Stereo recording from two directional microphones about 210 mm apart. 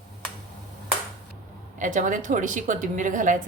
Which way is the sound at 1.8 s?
35° right (ahead or behind).